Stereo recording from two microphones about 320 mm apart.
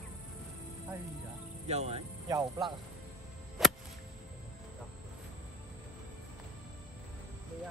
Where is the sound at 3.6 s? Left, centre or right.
Centre.